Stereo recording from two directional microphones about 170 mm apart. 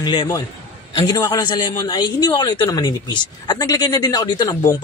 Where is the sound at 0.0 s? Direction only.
30° left (ahead or behind).